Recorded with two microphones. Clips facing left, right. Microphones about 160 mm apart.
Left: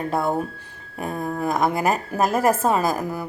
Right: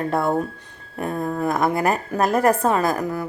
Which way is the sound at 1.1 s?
15° left (ahead or behind).